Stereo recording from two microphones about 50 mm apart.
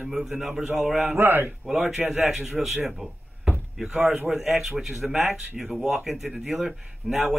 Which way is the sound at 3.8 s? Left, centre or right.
Centre.